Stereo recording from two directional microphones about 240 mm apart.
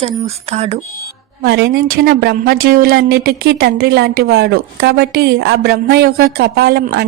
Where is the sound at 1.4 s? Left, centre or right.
Right.